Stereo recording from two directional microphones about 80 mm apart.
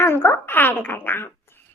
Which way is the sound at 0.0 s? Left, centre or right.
Left.